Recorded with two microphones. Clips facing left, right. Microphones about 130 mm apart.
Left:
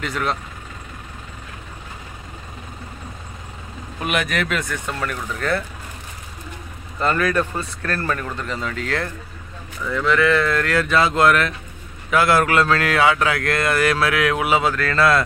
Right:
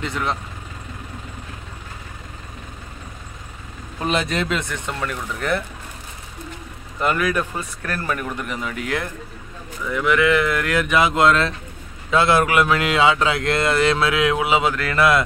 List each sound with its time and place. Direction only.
0.0 s speech: 20° right (ahead or behind)
4.0 s speech: 30° right (ahead or behind)
7.0 s speech: 10° right (ahead or behind)